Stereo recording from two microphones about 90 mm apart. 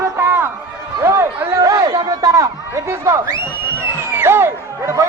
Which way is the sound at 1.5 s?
45° right (ahead or behind).